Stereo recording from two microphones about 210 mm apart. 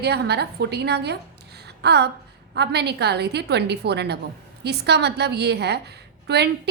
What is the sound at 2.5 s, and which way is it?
A woman's voice, 50° right (ahead or behind).